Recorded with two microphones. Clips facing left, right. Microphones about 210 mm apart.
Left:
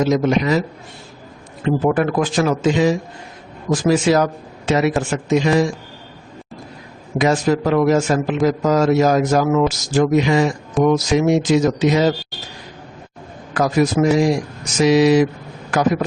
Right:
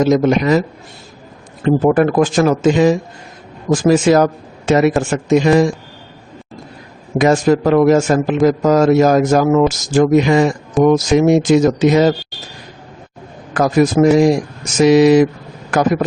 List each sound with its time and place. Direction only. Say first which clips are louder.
0.0 s a man's voice: right 4 dB; 50° right (ahead or behind)
1.6 s a man's voice: right 5 dB; 45° right (ahead or behind)
7.2 s a man's voice: right 4 dB; 50° right (ahead or behind)
13.5 s a man's voice: right 4 dB; 50° right (ahead or behind)